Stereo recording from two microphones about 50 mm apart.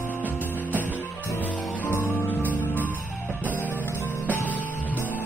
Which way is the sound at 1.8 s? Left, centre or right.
Left.